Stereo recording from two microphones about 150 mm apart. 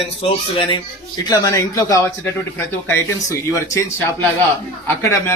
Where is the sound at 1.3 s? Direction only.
20° left (ahead or behind).